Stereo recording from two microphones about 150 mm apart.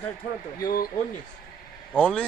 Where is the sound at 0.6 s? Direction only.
75° left (ahead or behind).